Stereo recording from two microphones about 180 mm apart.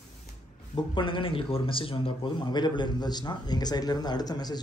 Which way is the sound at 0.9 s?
30° left (ahead or behind).